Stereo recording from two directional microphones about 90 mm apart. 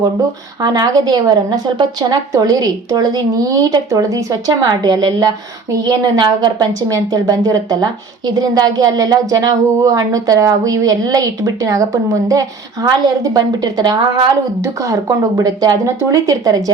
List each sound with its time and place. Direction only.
0.6 s speech: 45° right (ahead or behind)
14.6 s speech: 40° right (ahead or behind)